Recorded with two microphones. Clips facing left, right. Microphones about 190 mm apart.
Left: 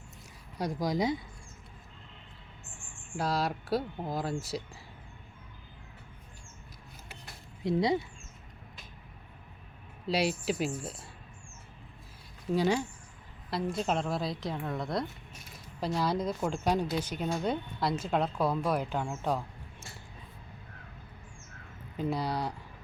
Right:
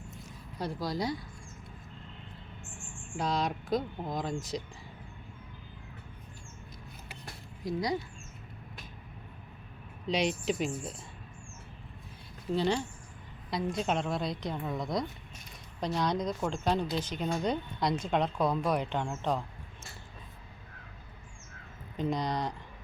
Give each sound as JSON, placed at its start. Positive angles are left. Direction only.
{"t": 0.6, "sound": "speech", "side_deg": 15}
{"t": 3.2, "sound": "speech", "side_deg": 5}
{"t": 7.6, "sound": "speech", "side_deg": 25}
{"t": 10.1, "sound": "speech", "side_deg": 5}
{"t": 12.5, "sound": "speech", "side_deg": 10}
{"t": 21.9, "sound": "speech", "side_deg": 5}